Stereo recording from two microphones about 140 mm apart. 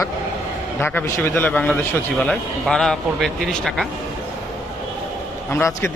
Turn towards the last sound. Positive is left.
turn(degrees=15)  # may be behind; listen again after turning